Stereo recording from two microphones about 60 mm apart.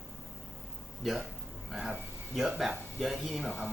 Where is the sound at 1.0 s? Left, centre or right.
Centre.